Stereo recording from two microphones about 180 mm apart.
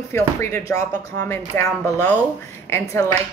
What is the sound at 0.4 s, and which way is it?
Speech, 15° left (ahead or behind).